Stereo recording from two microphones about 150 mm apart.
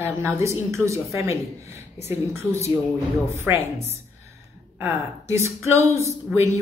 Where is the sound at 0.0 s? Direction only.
20° right (ahead or behind).